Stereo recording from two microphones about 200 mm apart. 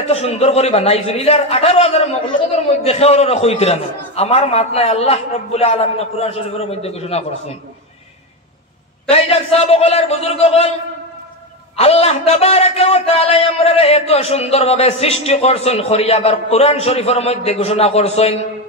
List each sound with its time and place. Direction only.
0.1 s a man's voice: 30° left (ahead or behind)
9.1 s a man's voice: 30° left (ahead or behind)
11.7 s a man's voice: 30° left (ahead or behind)